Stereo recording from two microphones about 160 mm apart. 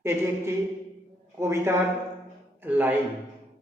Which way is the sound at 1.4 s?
15° right (ahead or behind).